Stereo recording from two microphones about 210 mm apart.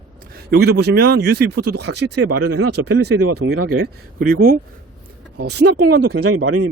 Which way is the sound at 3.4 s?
65° right (ahead or behind).